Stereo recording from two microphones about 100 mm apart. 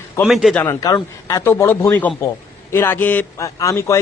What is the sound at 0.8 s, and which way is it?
A man's voice, 35° left (ahead or behind).